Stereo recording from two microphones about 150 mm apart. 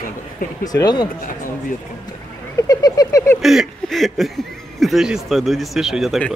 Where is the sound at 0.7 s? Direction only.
25° left (ahead or behind).